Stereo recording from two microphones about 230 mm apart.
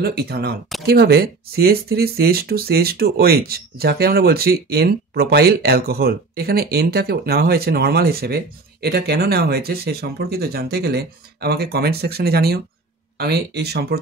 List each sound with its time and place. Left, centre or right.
0.0 s speech: right